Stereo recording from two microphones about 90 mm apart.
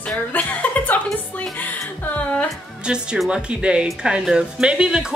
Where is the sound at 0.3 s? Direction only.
20° left (ahead or behind).